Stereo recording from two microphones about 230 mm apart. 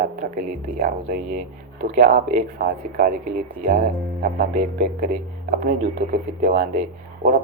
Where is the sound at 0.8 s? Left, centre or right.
Right.